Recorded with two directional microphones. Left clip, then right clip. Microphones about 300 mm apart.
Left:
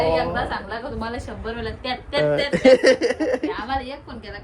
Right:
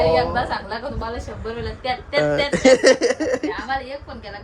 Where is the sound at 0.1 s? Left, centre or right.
Centre.